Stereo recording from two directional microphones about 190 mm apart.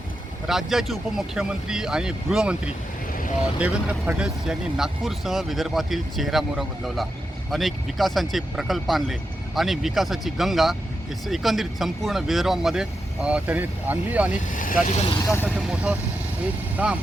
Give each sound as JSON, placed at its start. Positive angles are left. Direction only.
{"t": 0.4, "sound": "speech", "side_deg": 0}
{"t": 14.5, "sound": "speech", "side_deg": 45}
{"t": 15.1, "sound": "speech", "side_deg": 15}
{"t": 15.4, "sound": "speech", "side_deg": -5}